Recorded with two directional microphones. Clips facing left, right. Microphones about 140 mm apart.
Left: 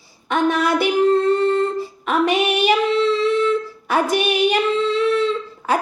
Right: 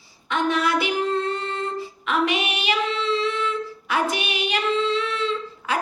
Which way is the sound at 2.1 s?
45° left (ahead or behind).